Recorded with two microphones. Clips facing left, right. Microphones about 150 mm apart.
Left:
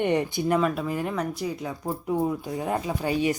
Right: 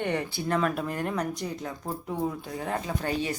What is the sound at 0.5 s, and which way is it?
Speech, centre (ahead or behind).